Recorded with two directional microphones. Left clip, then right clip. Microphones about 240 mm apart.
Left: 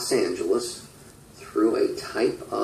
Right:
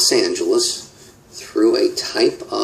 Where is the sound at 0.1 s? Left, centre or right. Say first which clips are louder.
Right 6 dB; right.